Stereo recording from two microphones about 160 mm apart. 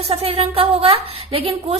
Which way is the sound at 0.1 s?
35° right (ahead or behind).